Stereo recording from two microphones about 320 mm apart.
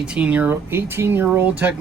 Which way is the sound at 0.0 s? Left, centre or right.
Centre.